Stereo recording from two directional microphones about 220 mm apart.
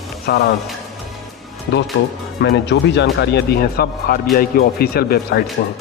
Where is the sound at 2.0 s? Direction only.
50° left (ahead or behind).